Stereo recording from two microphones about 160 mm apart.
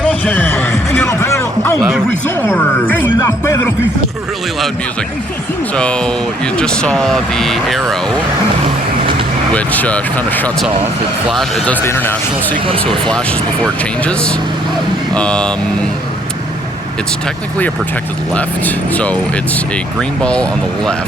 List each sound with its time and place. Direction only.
0.0 s music: 10° left (ahead or behind)
2.2 s speech: 10° left (ahead or behind)
5.7 s speech: 5° left (ahead or behind)
9.5 s speech: 10° left (ahead or behind)
12.5 s speech: 35° right (ahead or behind)
12.8 s speech: 5° left (ahead or behind)
18.3 s speech: 10° left (ahead or behind)